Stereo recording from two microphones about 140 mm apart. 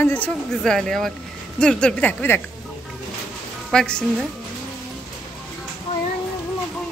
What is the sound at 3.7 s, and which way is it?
Speech, 5° left (ahead or behind).